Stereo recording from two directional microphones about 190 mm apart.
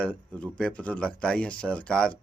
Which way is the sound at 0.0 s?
5° left (ahead or behind).